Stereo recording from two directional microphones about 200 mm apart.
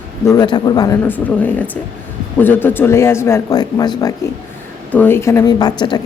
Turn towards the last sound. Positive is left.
turn(degrees=20)  # may be behind; listen again after turning